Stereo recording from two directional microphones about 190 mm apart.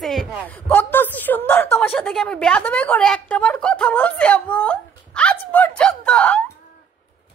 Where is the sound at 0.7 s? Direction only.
10° left (ahead or behind).